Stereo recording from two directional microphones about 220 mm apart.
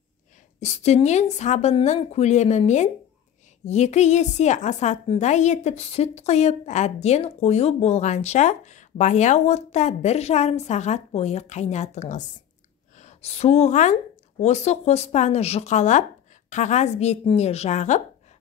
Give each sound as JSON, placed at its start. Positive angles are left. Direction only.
{"t": 0.6, "sound": "a woman's voice", "side_deg": 30}